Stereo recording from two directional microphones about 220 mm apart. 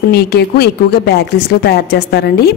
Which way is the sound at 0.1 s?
45° left (ahead or behind).